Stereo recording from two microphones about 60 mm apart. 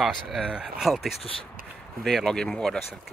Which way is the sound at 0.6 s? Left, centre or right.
Centre.